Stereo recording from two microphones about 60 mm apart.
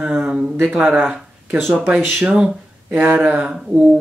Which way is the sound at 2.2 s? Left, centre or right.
Centre.